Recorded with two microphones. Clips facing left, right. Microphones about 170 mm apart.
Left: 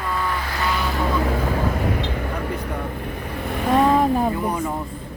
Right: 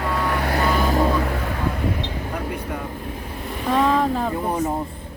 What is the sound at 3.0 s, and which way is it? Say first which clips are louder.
Vehicle: left 2 dB; 65° left (ahead or behind).